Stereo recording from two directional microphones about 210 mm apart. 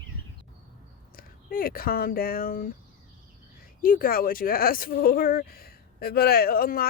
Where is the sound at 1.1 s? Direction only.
45° left (ahead or behind).